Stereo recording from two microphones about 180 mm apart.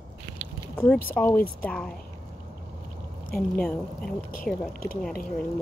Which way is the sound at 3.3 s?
5° left (ahead or behind).